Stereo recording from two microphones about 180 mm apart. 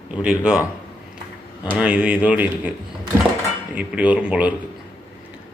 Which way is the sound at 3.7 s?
5° right (ahead or behind).